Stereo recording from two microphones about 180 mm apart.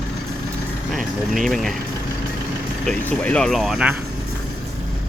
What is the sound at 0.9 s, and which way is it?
Speech, centre (ahead or behind).